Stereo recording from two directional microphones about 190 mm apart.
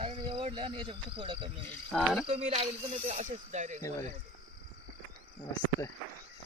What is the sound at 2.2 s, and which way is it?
Speech, 35° right (ahead or behind).